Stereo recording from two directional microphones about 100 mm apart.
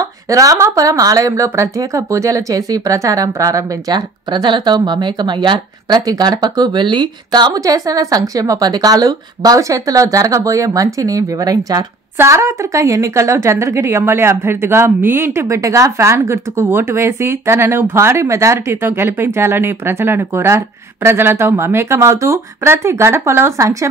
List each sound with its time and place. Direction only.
0.0 s speech: 35° right (ahead or behind)
4.3 s a woman's voice: 50° right (ahead or behind); by 23.9 s 30° right (ahead or behind)